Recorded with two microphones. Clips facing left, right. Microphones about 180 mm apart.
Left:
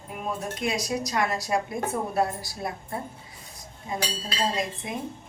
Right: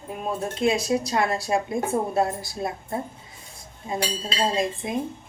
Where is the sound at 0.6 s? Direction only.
25° right (ahead or behind).